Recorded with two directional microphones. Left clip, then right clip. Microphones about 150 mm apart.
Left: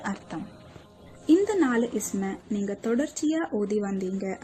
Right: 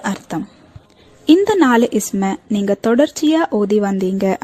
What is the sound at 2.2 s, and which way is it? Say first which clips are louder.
Speech: right 13 dB; 85° right.